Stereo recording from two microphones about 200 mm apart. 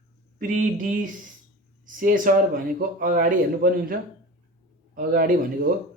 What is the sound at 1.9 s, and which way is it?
Speech, 40° right (ahead or behind).